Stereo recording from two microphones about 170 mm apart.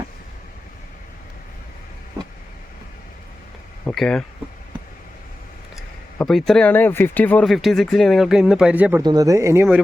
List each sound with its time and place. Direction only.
3.8 s speech: 5° left (ahead or behind)
6.1 s speech: centre (ahead or behind)
9.0 s speech: 20° right (ahead or behind)